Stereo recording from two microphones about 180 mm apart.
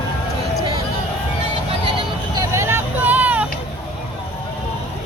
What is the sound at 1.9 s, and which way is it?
Vehicle, 20° right (ahead or behind).